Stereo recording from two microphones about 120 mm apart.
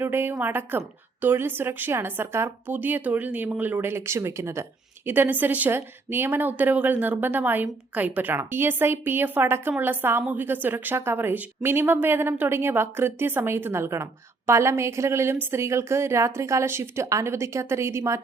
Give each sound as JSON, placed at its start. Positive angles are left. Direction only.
{"t": 0.0, "sound": "a woman's voice", "side_deg": -20}